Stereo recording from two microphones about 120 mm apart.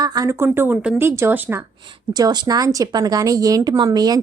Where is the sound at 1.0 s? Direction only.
20° right (ahead or behind).